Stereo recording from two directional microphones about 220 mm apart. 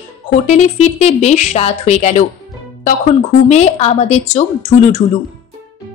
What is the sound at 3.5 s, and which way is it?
A woman's voice, 30° left (ahead or behind).